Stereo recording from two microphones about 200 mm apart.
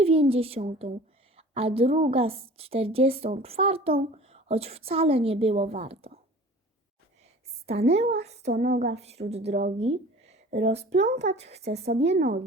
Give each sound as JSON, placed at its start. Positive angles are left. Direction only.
{"t": 0.0, "sound": "a woman's voice", "side_deg": -30}
{"t": 7.7, "sound": "speech", "side_deg": -30}
{"t": 8.6, "sound": "speech", "side_deg": -55}
{"t": 8.9, "sound": "speech", "side_deg": -30}